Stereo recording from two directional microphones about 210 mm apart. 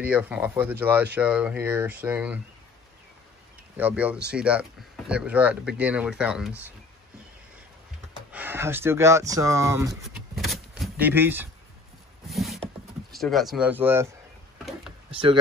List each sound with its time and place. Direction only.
0.0 s speech: 5° right (ahead or behind)
3.7 s speech: 5° right (ahead or behind)
8.3 s speech: 10° right (ahead or behind)
10.3 s vehicle: centre (ahead or behind)
12.3 s a sound: centre (ahead or behind)
13.1 s speech: centre (ahead or behind)
15.0 s speech: 25° right (ahead or behind)